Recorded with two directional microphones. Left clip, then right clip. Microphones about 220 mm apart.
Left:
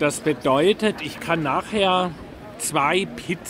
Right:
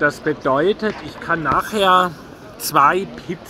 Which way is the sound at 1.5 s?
5° left (ahead or behind).